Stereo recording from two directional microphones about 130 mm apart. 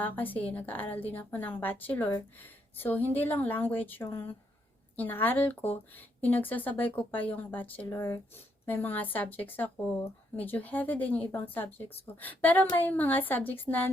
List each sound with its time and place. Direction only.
0.0 s a woman's voice: 15° left (ahead or behind)